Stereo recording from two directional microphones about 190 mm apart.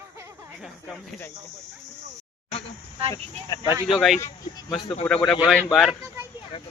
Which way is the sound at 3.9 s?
Centre (ahead or behind).